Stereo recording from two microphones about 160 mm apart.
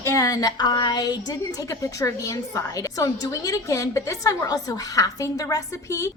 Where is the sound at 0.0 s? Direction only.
20° left (ahead or behind).